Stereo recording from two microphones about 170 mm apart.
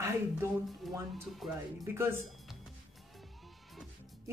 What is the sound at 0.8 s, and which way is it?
Speech, centre (ahead or behind).